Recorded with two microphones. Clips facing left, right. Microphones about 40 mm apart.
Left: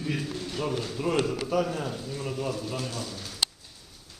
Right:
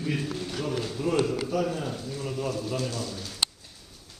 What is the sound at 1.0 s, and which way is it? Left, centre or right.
Speech, left.